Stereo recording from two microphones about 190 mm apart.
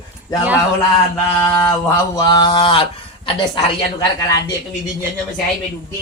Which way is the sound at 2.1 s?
20° left (ahead or behind).